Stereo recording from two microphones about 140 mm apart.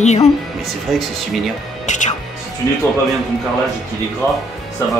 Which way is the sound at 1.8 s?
60° left (ahead or behind).